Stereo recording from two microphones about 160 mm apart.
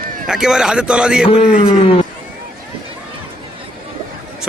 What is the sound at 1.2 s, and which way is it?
Speech, 35° left (ahead or behind).